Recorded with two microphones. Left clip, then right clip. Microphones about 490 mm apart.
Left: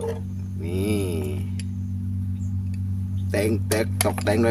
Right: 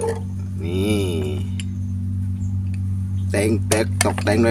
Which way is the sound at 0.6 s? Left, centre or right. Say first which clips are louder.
Right 4 dB; left.